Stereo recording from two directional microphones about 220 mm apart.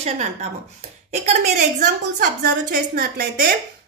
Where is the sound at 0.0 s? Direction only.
30° right (ahead or behind); by 3.4 s 45° right (ahead or behind).